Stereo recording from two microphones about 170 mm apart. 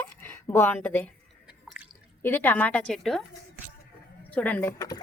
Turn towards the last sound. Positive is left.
turn(degrees=20)  # may be behind; listen again after turning